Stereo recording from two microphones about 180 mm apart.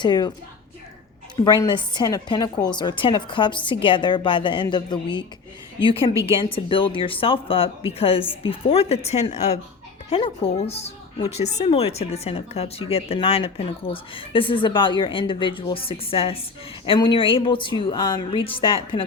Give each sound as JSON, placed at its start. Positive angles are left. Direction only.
{"t": 0.0, "sound": "a woman's voice", "side_deg": 25}
{"t": 1.5, "sound": "a woman's voice", "side_deg": 25}